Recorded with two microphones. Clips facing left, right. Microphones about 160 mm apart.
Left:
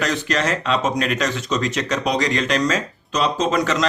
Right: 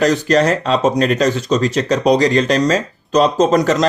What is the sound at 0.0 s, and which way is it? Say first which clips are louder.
Speech: right 8 dB; 35° right (ahead or behind).